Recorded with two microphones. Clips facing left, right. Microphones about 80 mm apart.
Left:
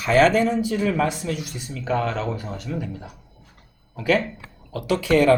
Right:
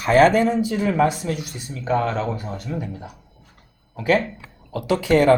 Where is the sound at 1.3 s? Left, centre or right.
Right.